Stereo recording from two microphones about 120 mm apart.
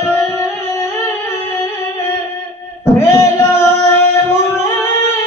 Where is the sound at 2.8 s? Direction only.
20° left (ahead or behind).